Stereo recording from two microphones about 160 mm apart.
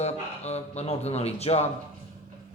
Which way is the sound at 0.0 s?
45° left (ahead or behind).